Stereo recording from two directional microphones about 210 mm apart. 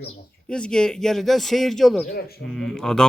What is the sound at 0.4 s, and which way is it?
Speech, 5° left (ahead or behind).